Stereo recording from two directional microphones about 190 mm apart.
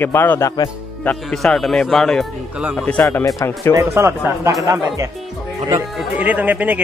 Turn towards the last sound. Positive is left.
turn(degrees=-10)  # may be behind; listen again after turning